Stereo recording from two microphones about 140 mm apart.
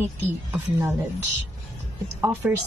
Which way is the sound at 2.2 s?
15° right (ahead or behind).